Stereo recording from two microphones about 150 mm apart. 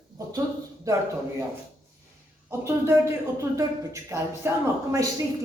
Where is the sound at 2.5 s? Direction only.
15° right (ahead or behind).